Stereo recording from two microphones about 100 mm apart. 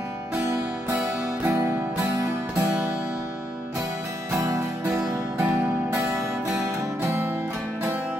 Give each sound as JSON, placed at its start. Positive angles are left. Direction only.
{"t": 4.8, "sound": "music", "side_deg": -20}
{"t": 7.0, "sound": "music", "side_deg": -20}